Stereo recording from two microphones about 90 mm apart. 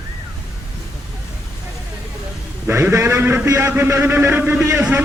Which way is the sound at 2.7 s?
30° right (ahead or behind).